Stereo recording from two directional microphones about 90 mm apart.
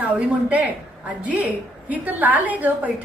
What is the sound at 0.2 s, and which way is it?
A woman's voice, 15° right (ahead or behind).